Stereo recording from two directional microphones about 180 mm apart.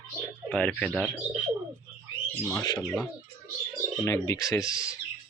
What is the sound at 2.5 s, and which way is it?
Speech, 20° left (ahead or behind).